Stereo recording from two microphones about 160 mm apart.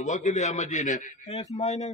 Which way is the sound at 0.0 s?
50° left (ahead or behind).